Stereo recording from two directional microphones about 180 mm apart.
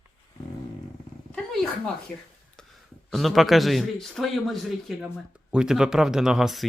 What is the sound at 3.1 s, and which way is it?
A man's voice, centre (ahead or behind).